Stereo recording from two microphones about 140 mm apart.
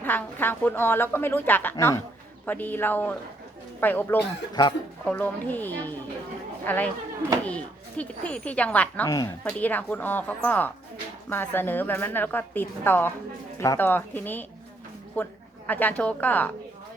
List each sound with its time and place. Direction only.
0.0 s a woman's voice: 15° left (ahead or behind)
4.6 s a woman's voice: 25° left (ahead or behind)
5.0 s a woman's voice: 10° left (ahead or behind)
9.0 s a woman's voice: 25° left (ahead or behind)
9.4 s a woman's voice: 10° left (ahead or behind)